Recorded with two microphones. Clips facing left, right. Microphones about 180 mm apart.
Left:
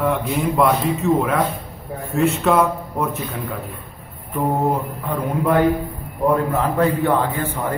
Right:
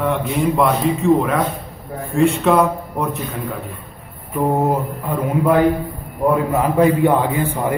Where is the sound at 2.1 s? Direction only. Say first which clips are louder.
Right 2 dB; centre (ahead or behind).